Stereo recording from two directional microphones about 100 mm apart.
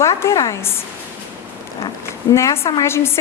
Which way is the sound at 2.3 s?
25° left (ahead or behind).